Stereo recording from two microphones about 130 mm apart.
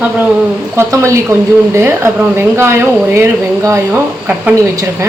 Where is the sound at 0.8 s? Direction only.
20° right (ahead or behind).